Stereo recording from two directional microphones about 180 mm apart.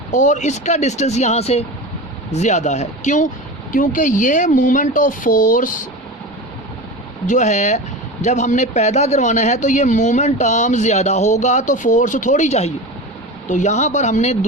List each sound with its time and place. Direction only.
0.1 s speech: 40° left (ahead or behind)
7.3 s speech: 40° left (ahead or behind)